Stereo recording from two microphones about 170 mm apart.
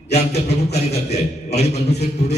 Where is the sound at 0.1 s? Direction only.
40° left (ahead or behind).